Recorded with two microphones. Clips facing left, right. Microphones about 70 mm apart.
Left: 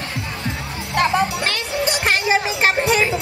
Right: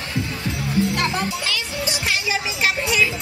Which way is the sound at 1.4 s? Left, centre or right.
Left.